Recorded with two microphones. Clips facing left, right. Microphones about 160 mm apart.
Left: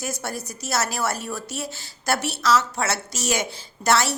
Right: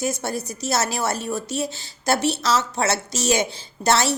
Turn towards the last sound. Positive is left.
turn(degrees=-25)  # may be behind; listen again after turning